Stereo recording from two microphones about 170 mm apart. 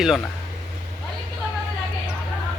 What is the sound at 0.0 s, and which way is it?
Speech, centre (ahead or behind).